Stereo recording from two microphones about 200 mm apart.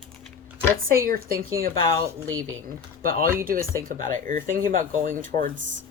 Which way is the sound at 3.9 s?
40° right (ahead or behind).